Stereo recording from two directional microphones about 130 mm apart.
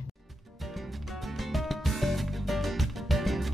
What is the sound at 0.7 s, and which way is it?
Music, centre (ahead or behind).